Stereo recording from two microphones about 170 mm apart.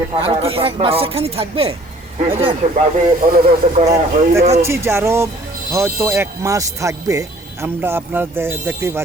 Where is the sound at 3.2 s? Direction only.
60° right (ahead or behind).